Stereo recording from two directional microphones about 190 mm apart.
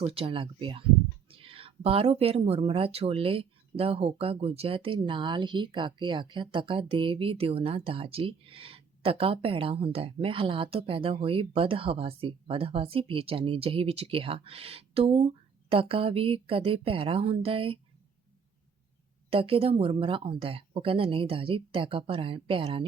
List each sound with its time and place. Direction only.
0.0 s speech: 30° right (ahead or behind)
19.3 s speech: 30° right (ahead or behind)